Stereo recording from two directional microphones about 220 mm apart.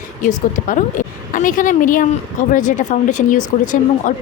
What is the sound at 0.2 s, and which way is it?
Speech, 35° left (ahead or behind).